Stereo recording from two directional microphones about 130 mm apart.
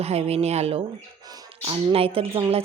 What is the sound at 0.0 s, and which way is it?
Speech, 55° right (ahead or behind).